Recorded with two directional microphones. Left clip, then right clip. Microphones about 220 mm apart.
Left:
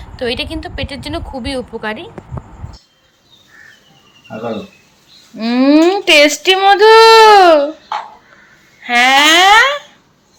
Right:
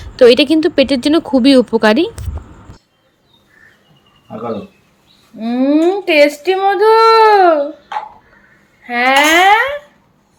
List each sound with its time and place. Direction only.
0.0 s a woman's voice: 15° right (ahead or behind)
5.4 s speech: 5° left (ahead or behind)
8.8 s speech: 5° left (ahead or behind)